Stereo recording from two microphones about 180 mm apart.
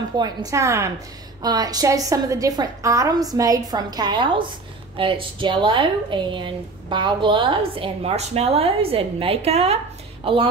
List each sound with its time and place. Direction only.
0.2 s a woman's voice: 20° right (ahead or behind)